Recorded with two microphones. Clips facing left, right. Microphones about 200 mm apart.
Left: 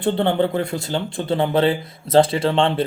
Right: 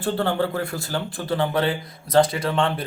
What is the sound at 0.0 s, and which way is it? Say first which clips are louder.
Speech: left 4 dB; 25° left (ahead or behind).